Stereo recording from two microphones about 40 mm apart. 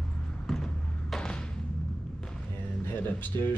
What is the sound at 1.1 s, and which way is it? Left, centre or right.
Music, left.